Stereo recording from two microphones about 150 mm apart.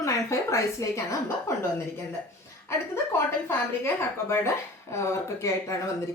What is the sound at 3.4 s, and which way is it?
A woman's voice, 15° left (ahead or behind).